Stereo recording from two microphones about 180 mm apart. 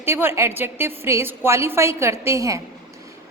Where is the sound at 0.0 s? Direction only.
15° right (ahead or behind).